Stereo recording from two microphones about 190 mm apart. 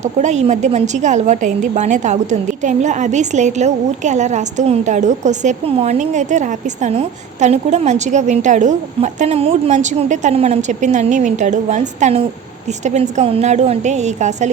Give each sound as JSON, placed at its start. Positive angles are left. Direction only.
{"t": 0.0, "sound": "a woman's voice", "side_deg": -35}